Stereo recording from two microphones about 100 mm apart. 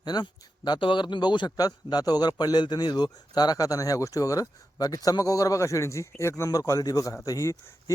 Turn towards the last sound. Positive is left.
turn(degrees=30)  # may be behind; listen again after turning